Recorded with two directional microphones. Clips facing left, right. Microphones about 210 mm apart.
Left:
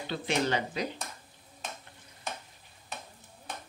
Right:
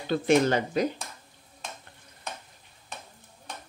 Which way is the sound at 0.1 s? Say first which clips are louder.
Right 8 dB; 45° right (ahead or behind).